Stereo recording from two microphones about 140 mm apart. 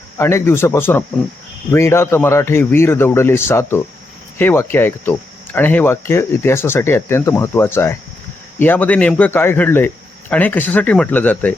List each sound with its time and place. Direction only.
0.2 s speech: 20° left (ahead or behind)